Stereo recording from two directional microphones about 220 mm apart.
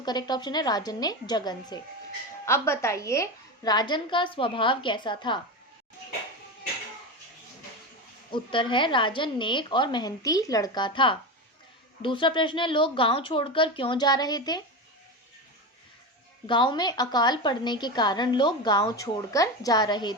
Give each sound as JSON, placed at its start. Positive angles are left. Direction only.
{"t": 0.0, "sound": "a woman's voice", "side_deg": 20}
{"t": 8.3, "sound": "a woman's voice", "side_deg": 20}
{"t": 16.5, "sound": "a woman's voice", "side_deg": 20}